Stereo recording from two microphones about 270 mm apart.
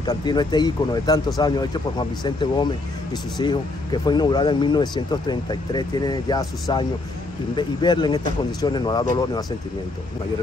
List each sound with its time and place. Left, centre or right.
0.0 s speech: centre